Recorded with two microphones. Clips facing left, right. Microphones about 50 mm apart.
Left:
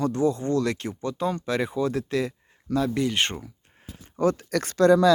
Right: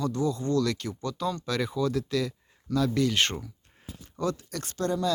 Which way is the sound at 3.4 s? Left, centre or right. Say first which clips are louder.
Left 1 dB; left.